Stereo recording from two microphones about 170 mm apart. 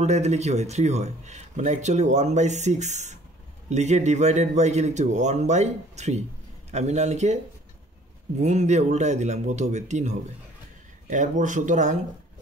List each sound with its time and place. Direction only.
0.0 s speech: 40° right (ahead or behind)
8.4 s speech: 40° right (ahead or behind)